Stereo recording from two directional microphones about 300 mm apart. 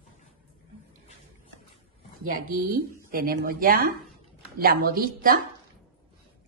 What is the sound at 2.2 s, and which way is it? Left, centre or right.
A woman's voice, right.